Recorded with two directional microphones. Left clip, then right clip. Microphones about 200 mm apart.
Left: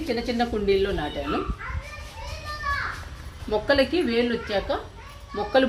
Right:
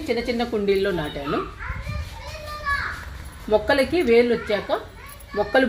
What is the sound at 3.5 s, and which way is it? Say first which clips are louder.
Speech: right 6 dB; 40° right (ahead or behind).